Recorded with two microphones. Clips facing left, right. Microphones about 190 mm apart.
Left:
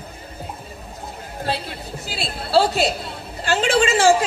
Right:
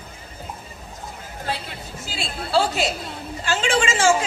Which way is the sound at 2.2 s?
35° left (ahead or behind).